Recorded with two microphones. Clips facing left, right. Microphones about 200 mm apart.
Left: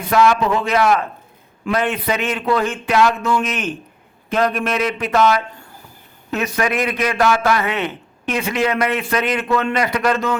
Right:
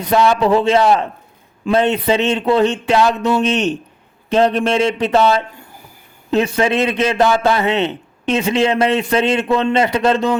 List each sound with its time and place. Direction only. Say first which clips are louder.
0.1 s a man's voice: right 2 dB; 30° right (ahead or behind)